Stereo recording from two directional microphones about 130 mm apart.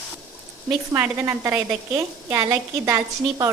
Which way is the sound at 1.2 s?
20° right (ahead or behind).